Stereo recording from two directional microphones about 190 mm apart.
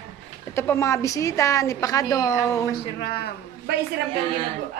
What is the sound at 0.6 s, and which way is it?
A woman's voice, 15° left (ahead or behind).